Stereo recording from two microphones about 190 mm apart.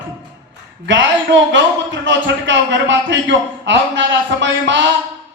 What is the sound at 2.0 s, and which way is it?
Speech, 70° right (ahead or behind).